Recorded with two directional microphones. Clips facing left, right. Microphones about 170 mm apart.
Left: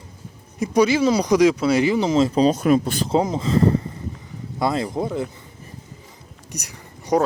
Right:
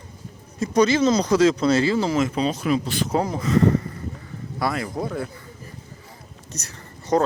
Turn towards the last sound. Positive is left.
turn(degrees=15)  # may be behind; listen again after turning